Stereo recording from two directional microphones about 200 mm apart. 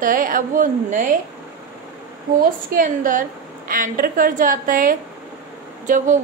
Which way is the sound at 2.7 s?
40° right (ahead or behind).